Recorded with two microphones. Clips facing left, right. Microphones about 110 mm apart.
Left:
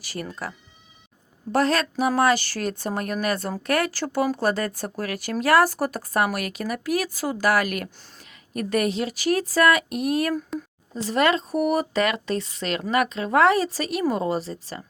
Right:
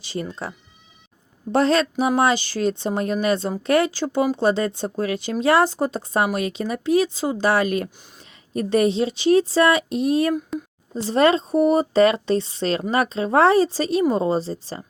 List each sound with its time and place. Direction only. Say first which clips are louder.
0.0 s speech: right 5 dB; 25° right (ahead or behind)
1.5 s speech: right 3 dB; 25° right (ahead or behind)